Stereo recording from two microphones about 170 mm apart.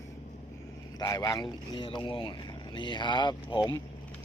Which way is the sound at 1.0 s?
20° left (ahead or behind).